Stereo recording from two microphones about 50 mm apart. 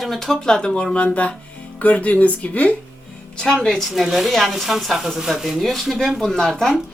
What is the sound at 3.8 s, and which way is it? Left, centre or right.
Speech, centre.